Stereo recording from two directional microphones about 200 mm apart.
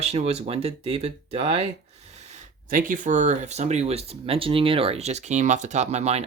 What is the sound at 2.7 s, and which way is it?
Speech, 40° right (ahead or behind).